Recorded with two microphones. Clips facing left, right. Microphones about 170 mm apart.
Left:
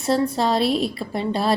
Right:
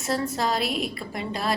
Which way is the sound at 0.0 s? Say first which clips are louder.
Left 6 dB; 30° left (ahead or behind).